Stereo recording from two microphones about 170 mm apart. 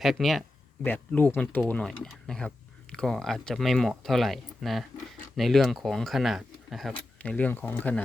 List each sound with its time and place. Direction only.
0.0 s speech: centre (ahead or behind)
0.8 s speech: 10° left (ahead or behind)